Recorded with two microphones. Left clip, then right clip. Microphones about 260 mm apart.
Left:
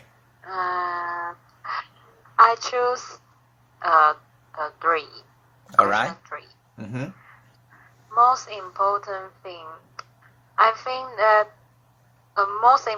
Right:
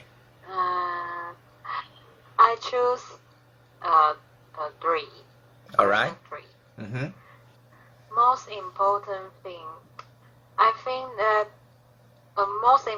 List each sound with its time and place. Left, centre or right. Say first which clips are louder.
0.5 s female singing: left 1 dB; centre
2.4 s a woman's voice: left 3 dB; centre
5.7 s speech: left 2 dB; left
6.3 s a sound: left 3 dB; left
8.1 s a woman's voice: left 3 dB; centre